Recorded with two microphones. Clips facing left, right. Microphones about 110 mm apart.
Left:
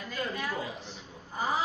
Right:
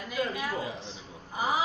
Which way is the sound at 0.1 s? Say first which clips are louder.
Right 3 dB; 10° right (ahead or behind).